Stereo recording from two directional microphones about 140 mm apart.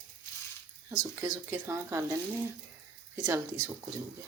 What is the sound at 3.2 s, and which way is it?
Speech, 20° right (ahead or behind).